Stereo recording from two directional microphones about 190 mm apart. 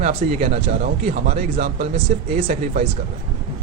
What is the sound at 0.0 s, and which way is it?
Speech, 30° right (ahead or behind).